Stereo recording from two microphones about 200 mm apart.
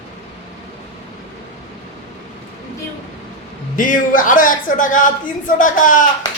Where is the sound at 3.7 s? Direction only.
40° left (ahead or behind).